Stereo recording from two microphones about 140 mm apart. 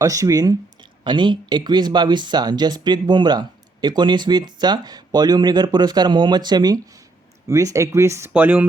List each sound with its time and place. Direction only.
0.0 s speech: 25° right (ahead or behind)